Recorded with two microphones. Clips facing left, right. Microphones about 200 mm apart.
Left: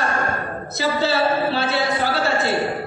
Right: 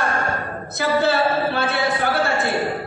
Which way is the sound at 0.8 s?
55° right (ahead or behind).